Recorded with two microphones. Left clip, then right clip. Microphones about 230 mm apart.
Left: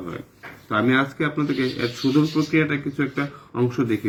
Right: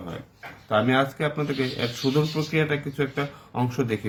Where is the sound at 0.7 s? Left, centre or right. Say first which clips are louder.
Left 1 dB; right.